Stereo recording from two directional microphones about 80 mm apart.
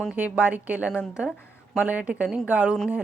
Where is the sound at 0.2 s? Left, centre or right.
Centre.